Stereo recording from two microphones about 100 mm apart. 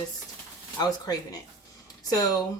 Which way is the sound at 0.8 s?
40° left (ahead or behind).